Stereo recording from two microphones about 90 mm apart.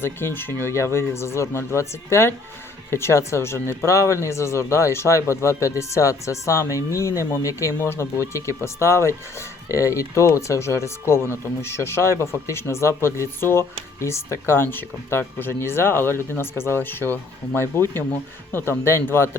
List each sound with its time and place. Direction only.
0.0 s speech: 25° left (ahead or behind)